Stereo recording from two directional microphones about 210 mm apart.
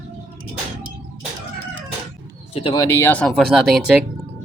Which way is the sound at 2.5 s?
30° left (ahead or behind).